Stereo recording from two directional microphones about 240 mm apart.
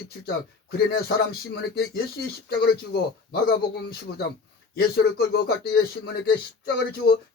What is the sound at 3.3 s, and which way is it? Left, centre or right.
Speech, left.